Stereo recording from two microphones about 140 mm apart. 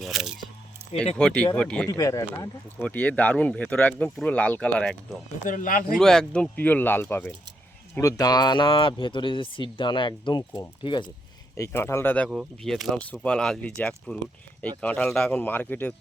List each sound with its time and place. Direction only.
0.0 s a sound: 5° right (ahead or behind)
1.1 s speech: 5° left (ahead or behind)
1.9 s speech: 25° left (ahead or behind)
2.8 s speech: 10° left (ahead or behind)
5.5 s speech: 75° left (ahead or behind)
6.0 s speech: 5° left (ahead or behind); by 11.1 s 35° left (ahead or behind)
11.5 s speech: 20° left (ahead or behind)
12.3 s speech: 5° right (ahead or behind)